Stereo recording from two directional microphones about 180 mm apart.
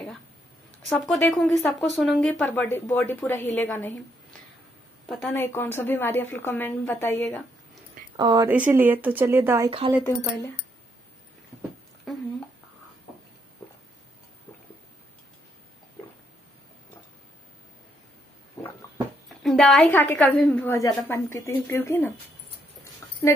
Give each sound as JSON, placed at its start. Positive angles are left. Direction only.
{"t": 0.8, "sound": "speech", "side_deg": 0}
{"t": 5.0, "sound": "speech", "side_deg": 5}
{"t": 8.2, "sound": "speech", "side_deg": -25}
{"t": 8.5, "sound": "speech", "side_deg": -10}
{"t": 9.7, "sound": "a woman's voice", "side_deg": -30}
{"t": 18.6, "sound": "a sound", "side_deg": 15}
{"t": 19.2, "sound": "speech", "side_deg": 0}